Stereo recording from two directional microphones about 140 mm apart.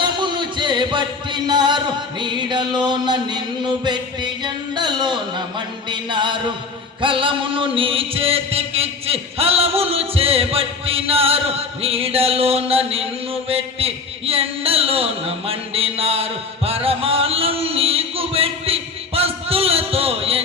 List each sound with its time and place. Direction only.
0.0 s music: 35° right (ahead or behind)